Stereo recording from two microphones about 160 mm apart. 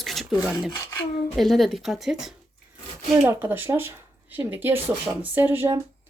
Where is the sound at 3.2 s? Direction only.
15° right (ahead or behind).